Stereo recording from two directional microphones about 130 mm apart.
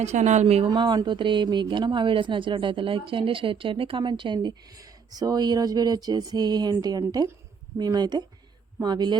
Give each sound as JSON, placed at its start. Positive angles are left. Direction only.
{"t": 0.0, "sound": "speech", "side_deg": -60}
{"t": 0.7, "sound": "speech", "side_deg": -35}